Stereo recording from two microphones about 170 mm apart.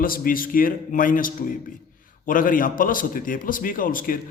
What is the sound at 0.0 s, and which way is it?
A man's voice, 55° left (ahead or behind).